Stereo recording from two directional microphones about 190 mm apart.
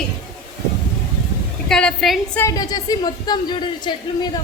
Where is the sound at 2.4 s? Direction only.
20° left (ahead or behind).